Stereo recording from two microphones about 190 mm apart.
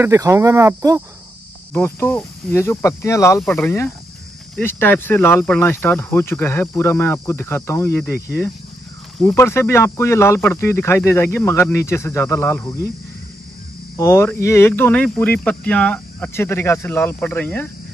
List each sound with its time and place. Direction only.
0.0 s speech: 15° right (ahead or behind)
1.7 s speech: 10° left (ahead or behind)
9.2 s speech: 15° left (ahead or behind)
13.9 s speech: 15° left (ahead or behind)